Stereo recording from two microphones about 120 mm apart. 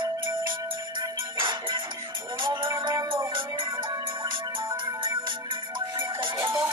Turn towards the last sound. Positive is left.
turn(degrees=-45)  # may be behind; listen again after turning